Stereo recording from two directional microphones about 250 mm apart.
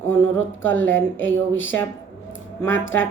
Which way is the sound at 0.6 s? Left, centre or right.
Centre.